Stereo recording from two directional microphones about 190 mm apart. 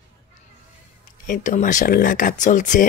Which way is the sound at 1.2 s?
45° left (ahead or behind).